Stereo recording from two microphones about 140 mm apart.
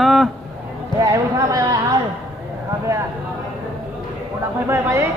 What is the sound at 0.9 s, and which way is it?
Speech, 25° right (ahead or behind).